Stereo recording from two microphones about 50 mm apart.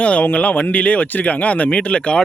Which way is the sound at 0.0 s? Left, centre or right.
Left.